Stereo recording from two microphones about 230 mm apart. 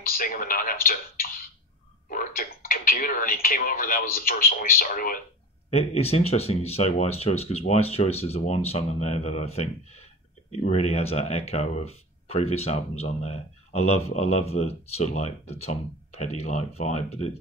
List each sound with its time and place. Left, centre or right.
0.2 s speech: left
5.7 s speech: left